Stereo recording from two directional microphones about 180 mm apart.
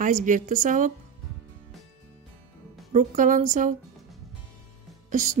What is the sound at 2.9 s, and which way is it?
Speech, 45° right (ahead or behind).